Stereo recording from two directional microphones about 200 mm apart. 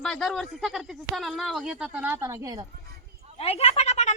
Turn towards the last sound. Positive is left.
turn(degrees=35)  # may be behind; listen again after turning